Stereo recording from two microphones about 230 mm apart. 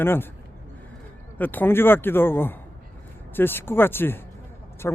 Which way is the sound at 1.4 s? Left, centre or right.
Centre.